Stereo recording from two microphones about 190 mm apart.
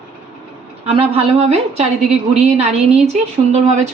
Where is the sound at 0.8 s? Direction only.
30° right (ahead or behind).